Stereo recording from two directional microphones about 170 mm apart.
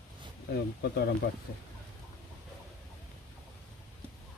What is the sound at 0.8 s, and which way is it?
Speech, 75° left (ahead or behind).